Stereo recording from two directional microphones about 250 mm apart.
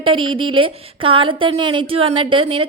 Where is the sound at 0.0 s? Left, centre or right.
Centre.